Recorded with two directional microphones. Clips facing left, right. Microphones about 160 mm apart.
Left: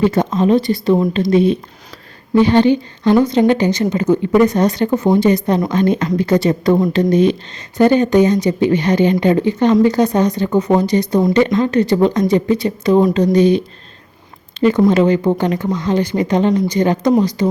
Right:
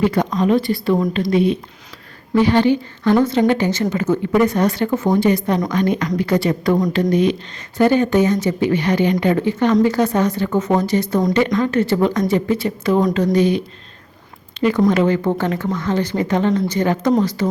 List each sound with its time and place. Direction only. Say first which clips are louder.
0.0 s a woman's voice: left 3 dB; 25° left (ahead or behind)
14.8 s speech: left 3 dB; 20° left (ahead or behind)